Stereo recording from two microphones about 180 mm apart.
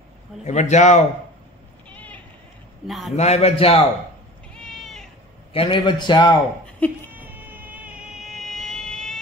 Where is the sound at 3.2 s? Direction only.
35° left (ahead or behind).